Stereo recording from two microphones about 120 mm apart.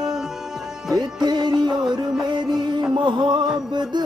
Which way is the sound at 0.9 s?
35° right (ahead or behind).